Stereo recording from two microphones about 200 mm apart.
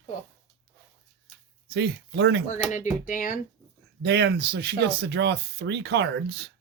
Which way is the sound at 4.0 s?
60° right (ahead or behind).